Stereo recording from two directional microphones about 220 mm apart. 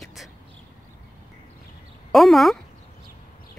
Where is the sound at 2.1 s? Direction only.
Centre (ahead or behind).